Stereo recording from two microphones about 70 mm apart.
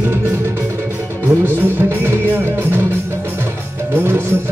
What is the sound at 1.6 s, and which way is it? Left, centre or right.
Music, right.